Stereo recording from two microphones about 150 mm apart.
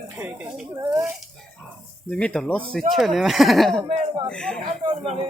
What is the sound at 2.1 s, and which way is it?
Speech, 5° left (ahead or behind).